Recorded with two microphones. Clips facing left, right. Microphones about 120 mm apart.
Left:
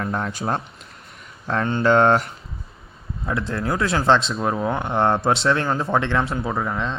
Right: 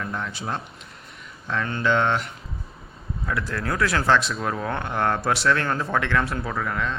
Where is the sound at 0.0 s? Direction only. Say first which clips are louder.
Left 5 dB; 45° left (ahead or behind).